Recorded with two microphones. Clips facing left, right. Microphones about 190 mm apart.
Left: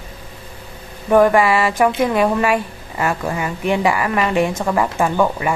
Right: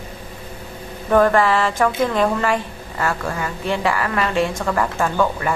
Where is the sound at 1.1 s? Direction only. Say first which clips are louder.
Left 2 dB; 10° left (ahead or behind).